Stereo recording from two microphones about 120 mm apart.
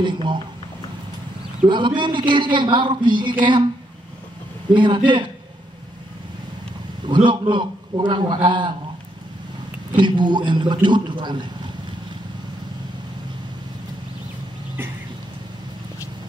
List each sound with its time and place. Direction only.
0.0 s a man's voice: 40° right (ahead or behind)
1.7 s a man's voice: 40° right (ahead or behind)
4.7 s a man's voice: 40° right (ahead or behind)
7.2 s a man's voice: 40° right (ahead or behind)
9.9 s a man's voice: 40° right (ahead or behind)